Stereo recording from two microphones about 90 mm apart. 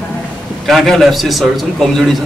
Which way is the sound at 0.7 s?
Centre (ahead or behind).